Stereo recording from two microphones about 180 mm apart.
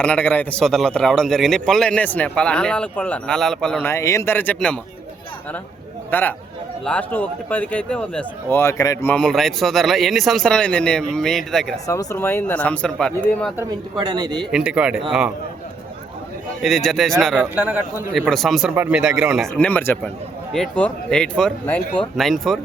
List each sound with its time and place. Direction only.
0.0 s a man's voice: 5° left (ahead or behind)
6.1 s speech: 10° left (ahead or behind)
9.1 s a man's voice: 5° left (ahead or behind)
11.9 s speech: 15° left (ahead or behind)
14.0 s a man's voice: 25° right (ahead or behind)
14.5 s a man's voice: 5° right (ahead or behind)
16.6 s a man's voice: centre (ahead or behind)
19.5 s a man's voice: 10° left (ahead or behind)